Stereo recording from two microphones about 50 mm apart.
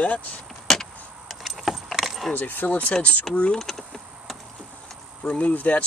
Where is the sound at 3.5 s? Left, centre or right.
Centre.